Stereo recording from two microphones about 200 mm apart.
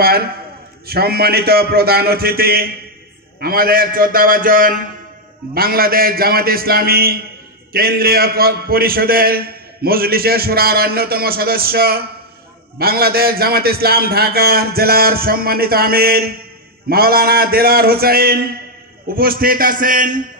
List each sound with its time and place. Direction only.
0.0 s a man's voice: 50° right (ahead or behind)